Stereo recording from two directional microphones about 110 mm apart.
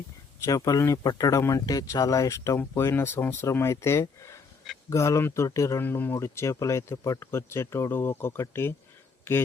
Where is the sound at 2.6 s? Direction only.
20° left (ahead or behind).